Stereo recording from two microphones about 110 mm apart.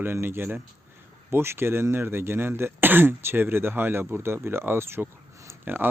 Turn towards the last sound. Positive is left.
turn(degrees=-20)  # may be behind; listen again after turning